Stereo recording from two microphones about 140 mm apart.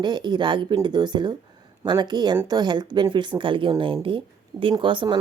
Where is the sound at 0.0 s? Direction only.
35° right (ahead or behind).